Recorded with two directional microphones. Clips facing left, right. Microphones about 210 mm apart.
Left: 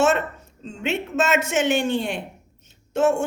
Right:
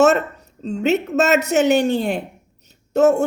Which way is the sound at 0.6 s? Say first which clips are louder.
Right 8 dB; 40° right (ahead or behind).